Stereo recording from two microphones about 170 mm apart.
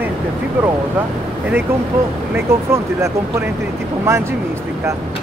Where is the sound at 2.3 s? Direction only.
15° right (ahead or behind).